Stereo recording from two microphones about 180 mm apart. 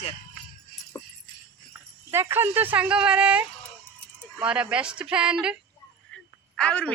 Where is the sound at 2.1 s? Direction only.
15° right (ahead or behind).